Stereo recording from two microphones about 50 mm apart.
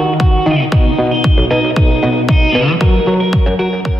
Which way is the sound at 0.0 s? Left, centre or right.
Centre.